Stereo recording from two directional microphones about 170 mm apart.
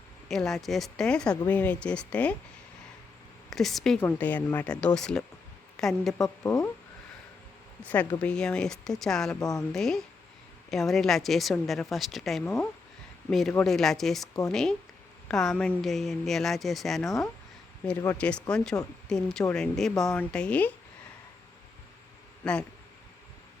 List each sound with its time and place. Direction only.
0.3 s speech: centre (ahead or behind)
3.5 s a woman's voice: centre (ahead or behind)
6.4 s speech: 15° left (ahead or behind)
8.2 s speech: 5° left (ahead or behind)
9.4 s a woman's voice: 20° left (ahead or behind)
9.7 s speech: centre (ahead or behind)